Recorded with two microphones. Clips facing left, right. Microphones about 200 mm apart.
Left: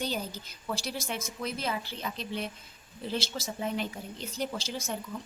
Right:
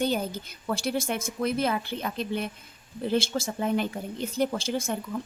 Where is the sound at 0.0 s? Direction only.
55° right (ahead or behind).